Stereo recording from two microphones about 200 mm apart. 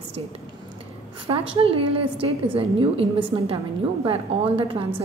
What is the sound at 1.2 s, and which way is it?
A woman's voice, 30° right (ahead or behind).